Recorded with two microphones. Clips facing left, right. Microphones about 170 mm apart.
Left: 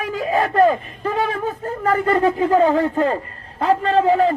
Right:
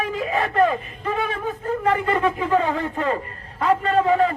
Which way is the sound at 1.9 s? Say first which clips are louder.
Left 4 dB; 40° left (ahead or behind).